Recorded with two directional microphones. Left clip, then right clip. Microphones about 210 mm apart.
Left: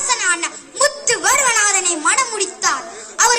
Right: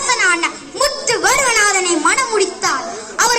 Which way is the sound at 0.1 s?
30° left (ahead or behind).